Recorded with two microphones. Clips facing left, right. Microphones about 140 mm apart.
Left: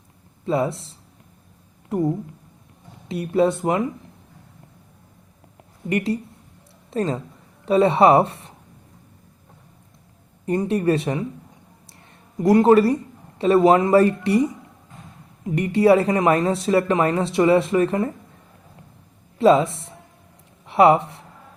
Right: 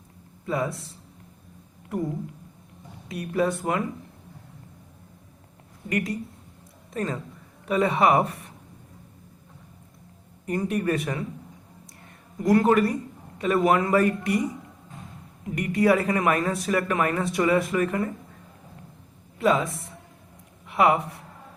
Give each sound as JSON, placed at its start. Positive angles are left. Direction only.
{"t": 0.4, "sound": "speech", "side_deg": 25}
{"t": 3.1, "sound": "speech", "side_deg": 25}
{"t": 5.9, "sound": "speech", "side_deg": 30}
{"t": 10.4, "sound": "speech", "side_deg": 30}
{"t": 12.4, "sound": "speech", "side_deg": 25}
{"t": 15.5, "sound": "speech", "side_deg": 30}
{"t": 19.4, "sound": "speech", "side_deg": 30}